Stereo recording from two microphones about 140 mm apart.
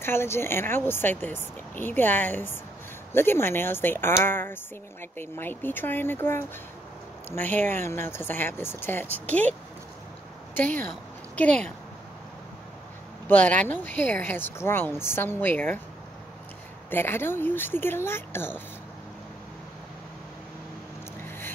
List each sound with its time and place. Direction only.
0.0 s speech: 15° left (ahead or behind)
10.5 s speech: 15° left (ahead or behind)
13.3 s speech: 10° left (ahead or behind)
16.9 s speech: 15° left (ahead or behind)